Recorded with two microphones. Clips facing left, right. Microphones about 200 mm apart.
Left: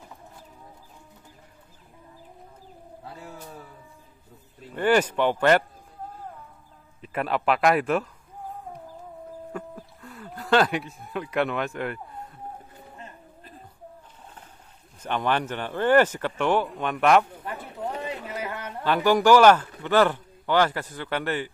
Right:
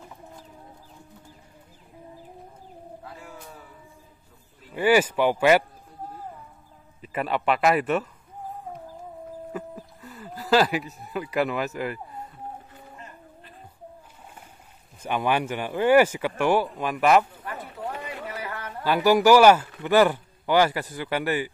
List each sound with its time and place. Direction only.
4.7 s speech: 5° right (ahead or behind)
7.0 s speech: centre (ahead or behind)
9.5 s music: 5° right (ahead or behind)
15.0 s speech: 10° right (ahead or behind)
17.4 s clip-clop: 20° left (ahead or behind)
18.0 s a sound: 20° left (ahead or behind)
18.9 s speech: 5° right (ahead or behind)